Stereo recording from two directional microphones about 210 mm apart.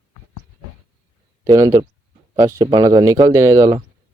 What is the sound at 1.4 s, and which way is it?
Speech, 15° right (ahead or behind).